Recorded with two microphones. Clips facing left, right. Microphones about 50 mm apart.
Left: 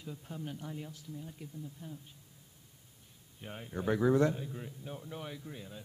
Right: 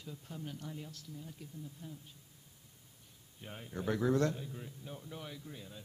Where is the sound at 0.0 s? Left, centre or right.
Centre.